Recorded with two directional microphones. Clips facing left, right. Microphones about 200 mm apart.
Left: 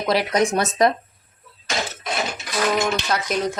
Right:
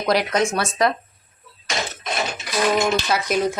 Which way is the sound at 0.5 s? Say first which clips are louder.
Left 2 dB; 20° left (ahead or behind).